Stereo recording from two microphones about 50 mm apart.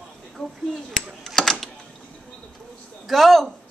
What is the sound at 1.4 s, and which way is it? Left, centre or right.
Speech, centre.